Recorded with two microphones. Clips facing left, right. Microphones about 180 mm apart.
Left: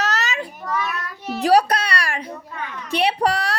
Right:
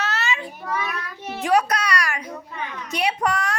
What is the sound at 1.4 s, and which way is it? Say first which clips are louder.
Music: left 4 dB; 35° left (ahead or behind).